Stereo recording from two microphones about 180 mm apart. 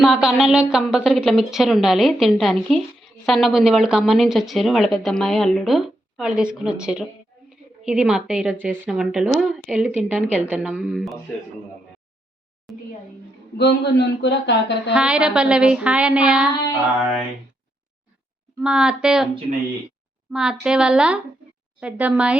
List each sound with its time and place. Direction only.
0.0 s a woman's voice: centre (ahead or behind)
12.7 s a sound: centre (ahead or behind)
13.6 s speech: 70° left (ahead or behind)
14.9 s a woman's voice: 5° right (ahead or behind)
18.6 s a woman's voice: 5° right (ahead or behind)
20.3 s a woman's voice: 5° right (ahead or behind)